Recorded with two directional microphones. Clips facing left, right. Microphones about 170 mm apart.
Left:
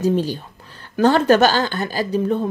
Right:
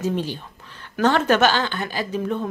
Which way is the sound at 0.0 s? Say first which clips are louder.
Left 5 dB; 40° left (ahead or behind).